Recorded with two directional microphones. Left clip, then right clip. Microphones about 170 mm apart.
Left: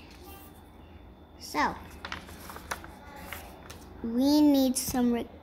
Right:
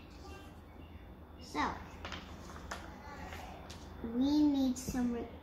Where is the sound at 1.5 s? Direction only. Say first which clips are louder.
Left 8 dB; 90° left.